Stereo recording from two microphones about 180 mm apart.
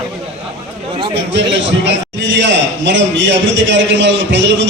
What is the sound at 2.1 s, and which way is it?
A man's voice, 85° right.